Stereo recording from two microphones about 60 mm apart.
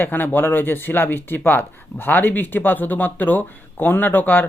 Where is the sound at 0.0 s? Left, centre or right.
Left.